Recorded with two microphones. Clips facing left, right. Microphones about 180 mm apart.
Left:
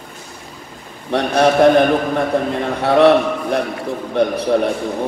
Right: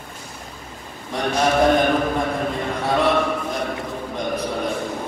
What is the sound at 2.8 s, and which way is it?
A man's voice, 65° left (ahead or behind).